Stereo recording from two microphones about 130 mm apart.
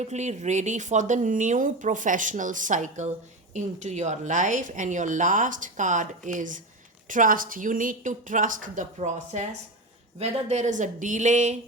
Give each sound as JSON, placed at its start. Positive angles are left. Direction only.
{"t": 0.0, "sound": "a woman's voice", "side_deg": -65}